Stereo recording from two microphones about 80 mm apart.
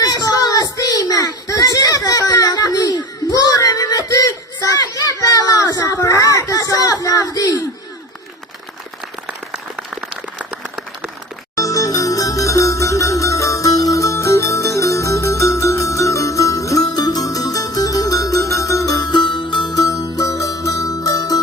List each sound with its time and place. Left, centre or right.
0.0 s a sound: left
9.2 s applause: centre
11.5 s music: left
19.1 s music: left
19.7 s music: left